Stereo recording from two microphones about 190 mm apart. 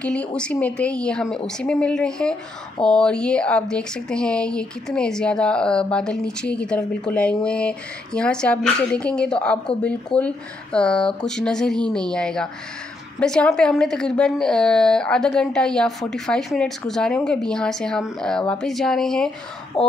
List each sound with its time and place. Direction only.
0.0 s speech: 5° left (ahead or behind)
19.7 s speech: 30° left (ahead or behind)